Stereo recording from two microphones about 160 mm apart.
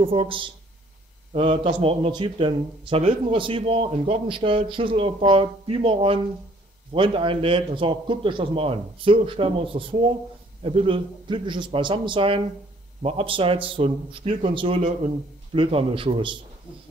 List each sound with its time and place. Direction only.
0.0 s a man's voice: 35° right (ahead or behind)